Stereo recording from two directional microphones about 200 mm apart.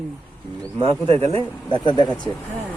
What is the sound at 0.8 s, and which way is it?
Speech, 25° right (ahead or behind).